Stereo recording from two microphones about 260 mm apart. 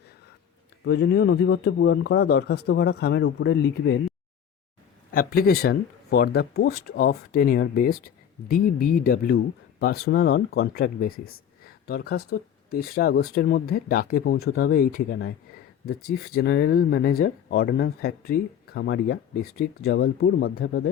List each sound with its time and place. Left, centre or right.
0.9 s speech: left
5.1 s speech: left